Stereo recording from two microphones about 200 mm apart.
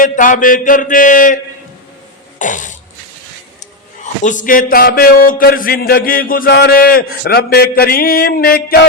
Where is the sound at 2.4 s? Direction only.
40° left (ahead or behind).